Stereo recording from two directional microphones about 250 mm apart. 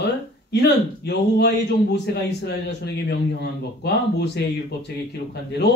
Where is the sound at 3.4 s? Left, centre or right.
Left.